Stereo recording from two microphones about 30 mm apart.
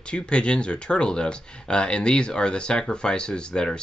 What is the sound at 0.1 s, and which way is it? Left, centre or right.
Speech, left.